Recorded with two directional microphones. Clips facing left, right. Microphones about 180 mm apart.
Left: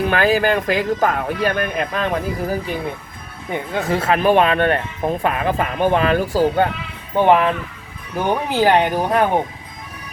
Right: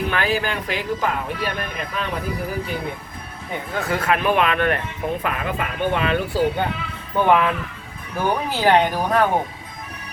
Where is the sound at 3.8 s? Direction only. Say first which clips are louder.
Left 3 dB; 25° left (ahead or behind).